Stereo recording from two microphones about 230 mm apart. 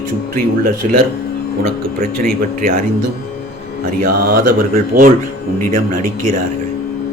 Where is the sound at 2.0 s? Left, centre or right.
Right.